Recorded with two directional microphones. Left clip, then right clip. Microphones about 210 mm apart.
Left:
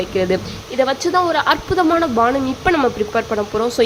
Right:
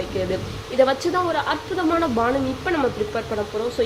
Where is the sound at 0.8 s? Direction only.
10° left (ahead or behind).